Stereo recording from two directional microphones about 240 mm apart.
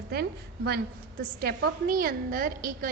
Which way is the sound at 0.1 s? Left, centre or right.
Right.